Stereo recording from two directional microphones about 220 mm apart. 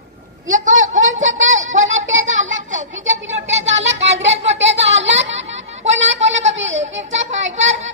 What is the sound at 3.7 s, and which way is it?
Child singing, 30° right (ahead or behind).